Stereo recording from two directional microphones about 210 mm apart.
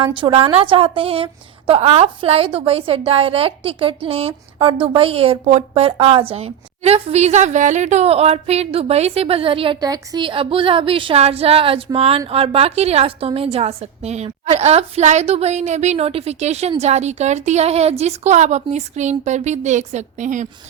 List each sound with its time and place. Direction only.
0.1 s a woman's voice: 25° right (ahead or behind)